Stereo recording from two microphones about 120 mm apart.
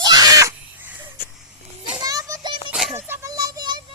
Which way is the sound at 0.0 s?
35° right (ahead or behind).